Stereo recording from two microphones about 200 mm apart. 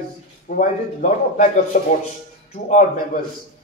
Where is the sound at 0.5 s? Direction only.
40° left (ahead or behind).